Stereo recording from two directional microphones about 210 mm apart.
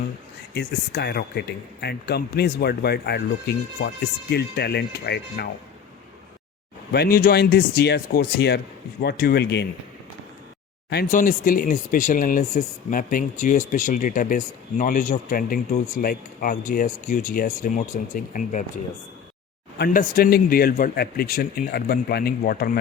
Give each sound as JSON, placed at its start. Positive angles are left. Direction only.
{"t": 0.5, "sound": "speech", "side_deg": 50}
{"t": 6.9, "sound": "speech", "side_deg": 45}
{"t": 10.8, "sound": "speech", "side_deg": 45}
{"t": 19.8, "sound": "speech", "side_deg": 45}